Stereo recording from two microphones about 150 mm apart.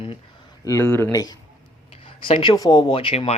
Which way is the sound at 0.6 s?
15° left (ahead or behind).